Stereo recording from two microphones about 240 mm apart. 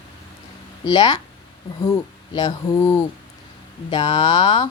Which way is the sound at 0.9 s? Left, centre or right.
Centre.